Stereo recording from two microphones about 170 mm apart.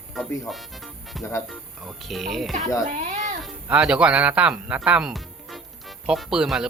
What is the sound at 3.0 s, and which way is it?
Speech, 45° right (ahead or behind).